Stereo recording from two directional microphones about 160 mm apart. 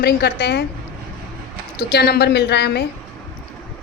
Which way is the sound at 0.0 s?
90° left.